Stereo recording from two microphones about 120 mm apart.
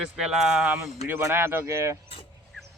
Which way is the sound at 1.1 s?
20° right (ahead or behind).